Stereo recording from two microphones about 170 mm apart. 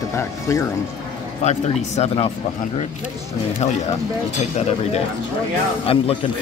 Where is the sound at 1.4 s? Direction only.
40° left (ahead or behind).